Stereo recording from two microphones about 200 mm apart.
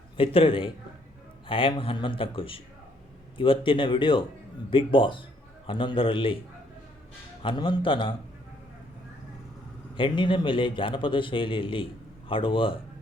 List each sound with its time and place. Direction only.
0.2 s a man's voice: 25° left (ahead or behind)
7.4 s a man's voice: 25° left (ahead or behind)
9.9 s a man's voice: 25° left (ahead or behind)